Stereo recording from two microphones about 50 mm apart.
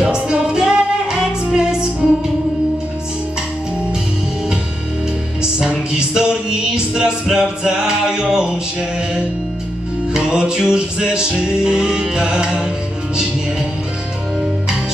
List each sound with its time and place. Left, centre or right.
0.0 s music: centre
5.4 s music: centre
10.1 s music: centre